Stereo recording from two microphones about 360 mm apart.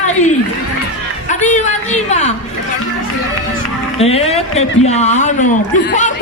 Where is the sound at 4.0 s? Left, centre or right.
Centre.